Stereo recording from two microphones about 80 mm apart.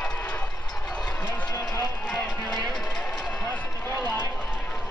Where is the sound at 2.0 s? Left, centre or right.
Centre.